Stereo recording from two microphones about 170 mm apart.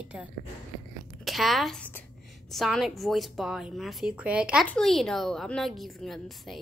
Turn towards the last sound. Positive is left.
turn(degrees=0)  # may be behind; listen again after turning